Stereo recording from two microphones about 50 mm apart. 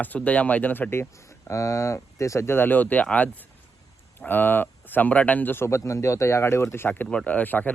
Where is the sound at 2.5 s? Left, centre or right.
Left.